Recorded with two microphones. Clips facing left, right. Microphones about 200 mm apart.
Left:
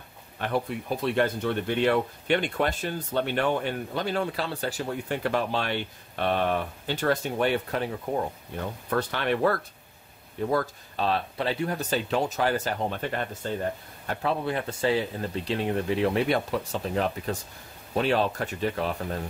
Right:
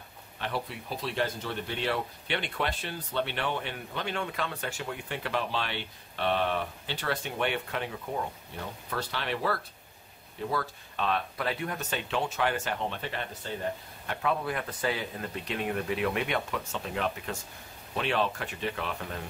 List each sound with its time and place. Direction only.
0.4 s speech: 50° left (ahead or behind)
8.9 s speech: 55° left (ahead or behind)
10.5 s speech: 40° left (ahead or behind)
14.0 s speech: 30° left (ahead or behind)